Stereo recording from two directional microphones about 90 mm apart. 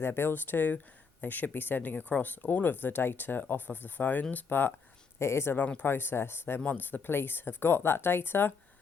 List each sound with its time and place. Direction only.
0.0 s speech: 25° left (ahead or behind)